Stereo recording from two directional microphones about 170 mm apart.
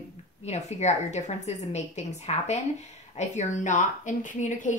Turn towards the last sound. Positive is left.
turn(degrees=45)  # may be behind; listen again after turning